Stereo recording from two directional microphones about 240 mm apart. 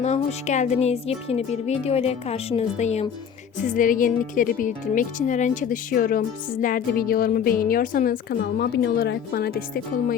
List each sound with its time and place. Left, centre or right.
0.0 s speech: left